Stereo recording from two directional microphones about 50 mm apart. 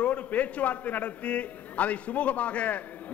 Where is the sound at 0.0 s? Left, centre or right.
Left.